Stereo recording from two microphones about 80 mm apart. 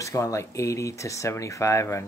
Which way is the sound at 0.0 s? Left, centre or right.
Left.